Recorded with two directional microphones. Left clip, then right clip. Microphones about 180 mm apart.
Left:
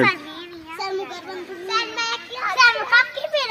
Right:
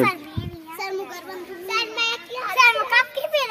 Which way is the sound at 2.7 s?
40° right (ahead or behind).